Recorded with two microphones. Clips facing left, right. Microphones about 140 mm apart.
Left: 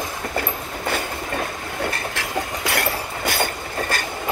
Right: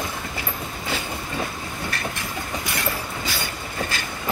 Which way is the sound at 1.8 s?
75° left (ahead or behind).